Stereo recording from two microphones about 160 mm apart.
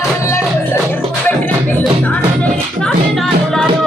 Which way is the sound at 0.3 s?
15° left (ahead or behind).